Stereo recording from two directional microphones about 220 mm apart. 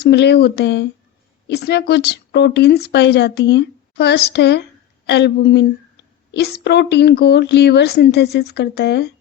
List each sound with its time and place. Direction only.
0.0 s a woman's voice: 50° left (ahead or behind)